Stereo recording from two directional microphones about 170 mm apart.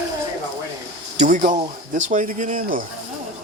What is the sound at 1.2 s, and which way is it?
Speech, 50° right (ahead or behind).